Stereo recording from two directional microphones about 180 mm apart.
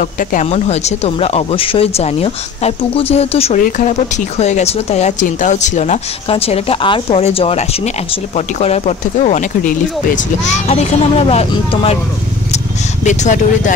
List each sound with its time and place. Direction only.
0.0 s speech: 50° left (ahead or behind)
13.0 s speech: 40° left (ahead or behind)